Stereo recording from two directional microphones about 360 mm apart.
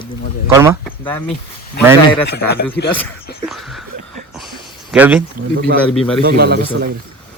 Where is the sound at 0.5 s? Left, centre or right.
Centre.